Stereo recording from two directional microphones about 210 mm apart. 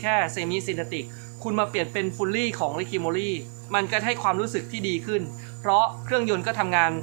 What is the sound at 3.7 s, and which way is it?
Speech, 10° right (ahead or behind).